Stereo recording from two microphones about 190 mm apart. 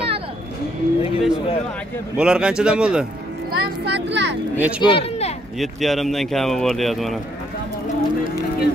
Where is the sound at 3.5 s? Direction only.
65° right (ahead or behind).